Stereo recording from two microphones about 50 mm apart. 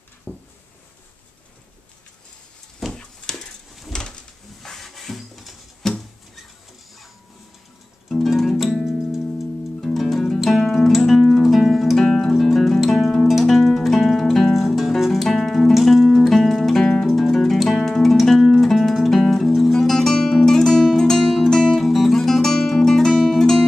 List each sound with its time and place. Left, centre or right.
0.3 s a sound: right
2.9 s a sound: centre
8.3 s music: centre
9.8 s music: centre
12.0 s music: centre
12.3 s music: centre